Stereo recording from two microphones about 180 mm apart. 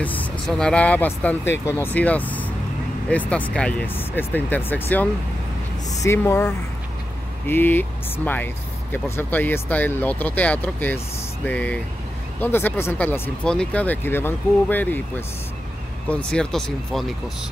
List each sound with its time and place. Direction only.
0.0 s speech: 10° left (ahead or behind)